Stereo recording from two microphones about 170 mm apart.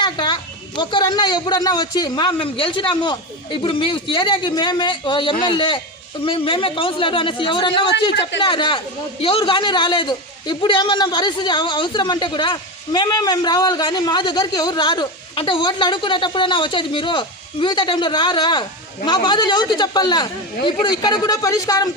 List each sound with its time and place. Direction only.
0.0 s a sound: 25° left (ahead or behind)
0.8 s a man's voice: 25° left (ahead or behind)
8.1 s a man's voice: 90° left
8.4 s a man's voice: 30° left (ahead or behind)